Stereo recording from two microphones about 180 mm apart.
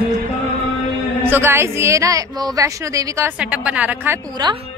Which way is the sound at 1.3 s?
15° right (ahead or behind).